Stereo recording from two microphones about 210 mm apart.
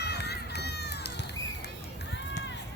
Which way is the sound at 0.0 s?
50° left (ahead or behind).